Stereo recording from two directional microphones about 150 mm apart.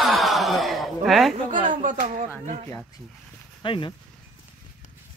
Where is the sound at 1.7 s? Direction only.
60° right (ahead or behind).